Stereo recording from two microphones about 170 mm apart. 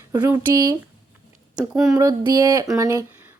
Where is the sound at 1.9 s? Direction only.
20° right (ahead or behind).